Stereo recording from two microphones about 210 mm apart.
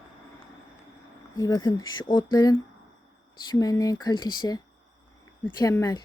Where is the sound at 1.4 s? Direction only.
15° left (ahead or behind).